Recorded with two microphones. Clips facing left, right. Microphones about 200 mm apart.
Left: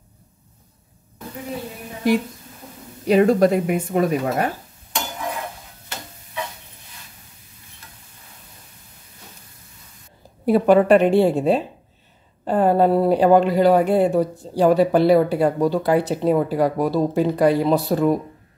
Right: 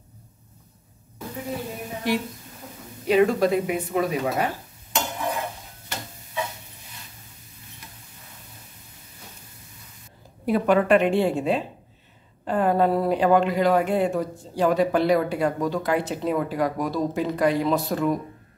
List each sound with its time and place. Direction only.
3.1 s speech: 45° left (ahead or behind)
5.1 s a sound: centre (ahead or behind)
10.4 s speech: 35° left (ahead or behind)